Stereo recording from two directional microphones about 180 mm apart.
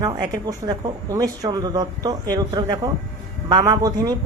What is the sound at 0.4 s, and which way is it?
Speech, 20° right (ahead or behind).